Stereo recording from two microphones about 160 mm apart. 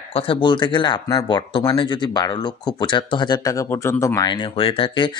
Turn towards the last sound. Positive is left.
turn(degrees=35)  # may be behind; listen again after turning